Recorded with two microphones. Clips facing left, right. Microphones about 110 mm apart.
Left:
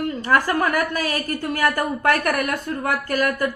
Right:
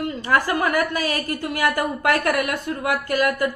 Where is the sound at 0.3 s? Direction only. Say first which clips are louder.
Even; 20° right (ahead or behind).